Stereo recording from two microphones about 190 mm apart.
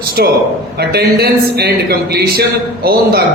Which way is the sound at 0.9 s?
55° right (ahead or behind).